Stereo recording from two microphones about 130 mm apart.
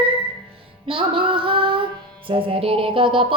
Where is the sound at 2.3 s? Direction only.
45° right (ahead or behind).